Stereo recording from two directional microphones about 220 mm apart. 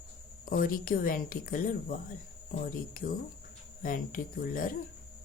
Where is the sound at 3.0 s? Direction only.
40° left (ahead or behind).